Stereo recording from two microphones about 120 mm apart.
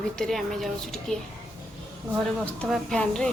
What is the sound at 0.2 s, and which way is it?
Speech, centre (ahead or behind).